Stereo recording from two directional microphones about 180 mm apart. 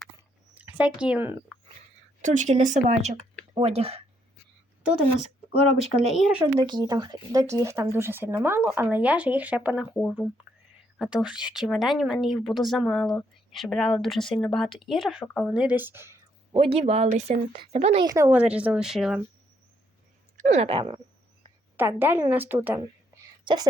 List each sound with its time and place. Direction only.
0.2 s a sound: 10° right (ahead or behind)
2.2 s speech: 45° right (ahead or behind)
6.0 s speech: centre (ahead or behind)
6.4 s speech: 25° right (ahead or behind); by 9.9 s 5° right (ahead or behind)
10.0 s speech: 5° left (ahead or behind)
10.9 s speech: 5° right (ahead or behind)
15.6 s speech: 10° right (ahead or behind)
16.5 s speech: 30° right (ahead or behind)
18.0 s speech: 20° right (ahead or behind)
18.3 s speech: 5° right (ahead or behind)
20.3 s a sound: 45° right (ahead or behind)
20.7 s speech: 30° right (ahead or behind)
21.8 s speech: 10° right (ahead or behind)
23.1 s a sound: 20° right (ahead or behind)